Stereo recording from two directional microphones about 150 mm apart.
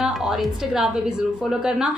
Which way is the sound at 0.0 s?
5° right (ahead or behind).